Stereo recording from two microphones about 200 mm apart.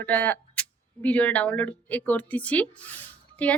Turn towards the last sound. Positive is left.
turn(degrees=10)  # may be behind; listen again after turning